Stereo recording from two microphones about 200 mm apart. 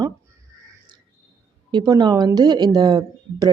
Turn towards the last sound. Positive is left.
turn(degrees=-20)  # may be behind; listen again after turning